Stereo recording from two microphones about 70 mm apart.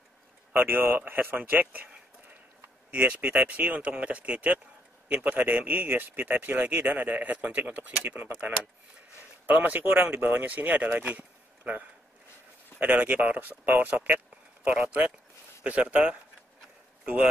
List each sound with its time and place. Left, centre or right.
0.5 s speech: right